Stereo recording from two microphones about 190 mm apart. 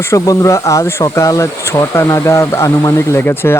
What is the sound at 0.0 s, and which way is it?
Speech, 15° left (ahead or behind).